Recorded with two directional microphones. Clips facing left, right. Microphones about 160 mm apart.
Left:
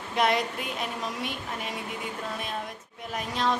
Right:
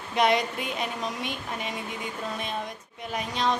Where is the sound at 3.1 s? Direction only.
Centre (ahead or behind).